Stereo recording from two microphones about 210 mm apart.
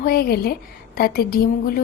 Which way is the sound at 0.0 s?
45° left (ahead or behind).